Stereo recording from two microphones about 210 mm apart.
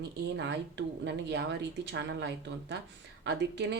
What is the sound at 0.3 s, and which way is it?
Speech, 55° right (ahead or behind).